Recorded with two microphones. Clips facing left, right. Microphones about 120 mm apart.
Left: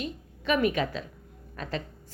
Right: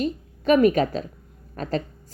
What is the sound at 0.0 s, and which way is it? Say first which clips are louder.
A woman's voice: right 9 dB; 40° right (ahead or behind).